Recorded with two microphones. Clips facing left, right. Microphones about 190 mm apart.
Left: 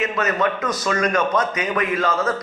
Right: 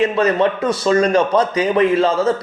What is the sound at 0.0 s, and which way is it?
A man's voice, 30° right (ahead or behind).